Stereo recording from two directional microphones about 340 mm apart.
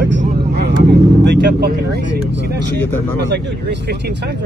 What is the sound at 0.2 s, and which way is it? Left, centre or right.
Vehicle, right.